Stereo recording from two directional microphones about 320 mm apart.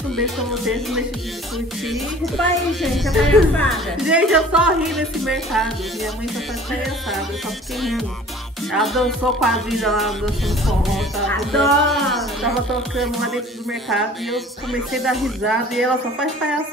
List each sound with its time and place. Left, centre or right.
0.1 s speech: centre
8.7 s speech: centre